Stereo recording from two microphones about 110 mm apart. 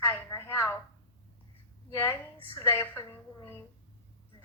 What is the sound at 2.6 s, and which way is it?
Speech, 25° left (ahead or behind).